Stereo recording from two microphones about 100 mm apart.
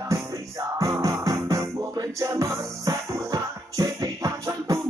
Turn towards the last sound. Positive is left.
turn(degrees=-35)  # may be behind; listen again after turning